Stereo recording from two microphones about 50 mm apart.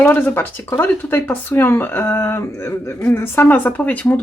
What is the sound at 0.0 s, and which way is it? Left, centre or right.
Speech, left.